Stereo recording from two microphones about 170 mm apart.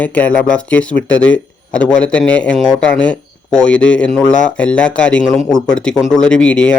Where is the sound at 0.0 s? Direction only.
10° left (ahead or behind).